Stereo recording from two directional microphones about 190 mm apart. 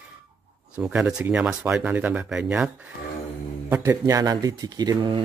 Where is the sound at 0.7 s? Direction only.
5° right (ahead or behind).